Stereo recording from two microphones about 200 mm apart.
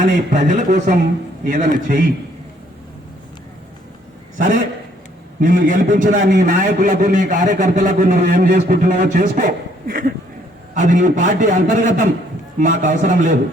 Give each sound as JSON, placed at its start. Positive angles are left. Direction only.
{"t": 0.3, "sound": "a man's voice", "side_deg": -40}
{"t": 4.4, "sound": "a man's voice", "side_deg": -40}